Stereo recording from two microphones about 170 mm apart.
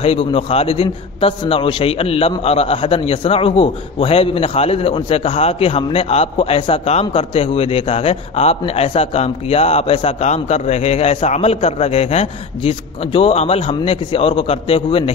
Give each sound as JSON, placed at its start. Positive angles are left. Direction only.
{"t": 0.0, "sound": "a man's voice", "side_deg": 35}